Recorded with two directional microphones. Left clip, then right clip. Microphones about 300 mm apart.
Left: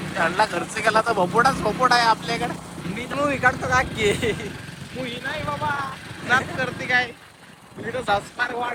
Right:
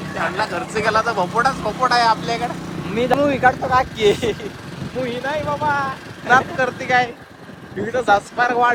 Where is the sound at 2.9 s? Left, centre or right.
Right.